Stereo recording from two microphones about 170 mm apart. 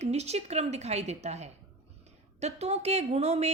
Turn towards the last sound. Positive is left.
turn(degrees=-40)  # may be behind; listen again after turning